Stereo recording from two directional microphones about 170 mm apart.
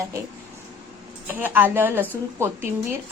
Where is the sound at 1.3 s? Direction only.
10° right (ahead or behind).